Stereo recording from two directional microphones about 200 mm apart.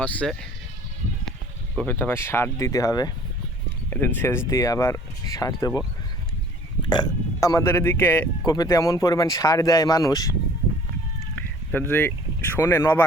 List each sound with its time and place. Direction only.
0.0 s speech: 5° left (ahead or behind)
1.7 s speech: 10° left (ahead or behind)
6.9 s speech: 20° left (ahead or behind)
11.7 s speech: 10° left (ahead or behind)